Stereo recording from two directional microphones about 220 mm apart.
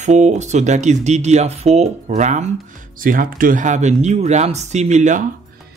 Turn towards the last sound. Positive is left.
turn(degrees=-35)  # may be behind; listen again after turning